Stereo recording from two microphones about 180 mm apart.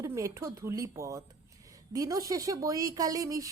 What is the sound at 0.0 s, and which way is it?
A woman's voice, 15° right (ahead or behind).